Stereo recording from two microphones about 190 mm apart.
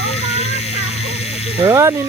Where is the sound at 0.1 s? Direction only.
35° left (ahead or behind).